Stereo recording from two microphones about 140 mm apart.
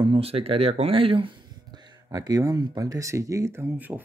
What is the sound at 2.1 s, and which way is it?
Speech, 25° right (ahead or behind).